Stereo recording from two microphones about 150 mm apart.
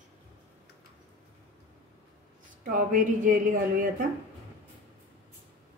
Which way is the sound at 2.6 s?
60° right (ahead or behind).